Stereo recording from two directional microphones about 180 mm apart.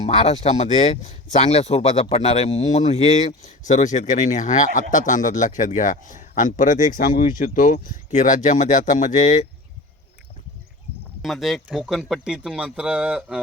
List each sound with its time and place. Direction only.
0.0 s speech: 35° left (ahead or behind)
11.2 s speech: centre (ahead or behind)